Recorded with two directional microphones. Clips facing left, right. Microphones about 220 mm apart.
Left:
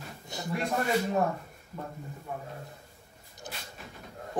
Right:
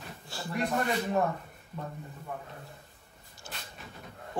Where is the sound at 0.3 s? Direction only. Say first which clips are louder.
Left 2 dB; 20° left (ahead or behind).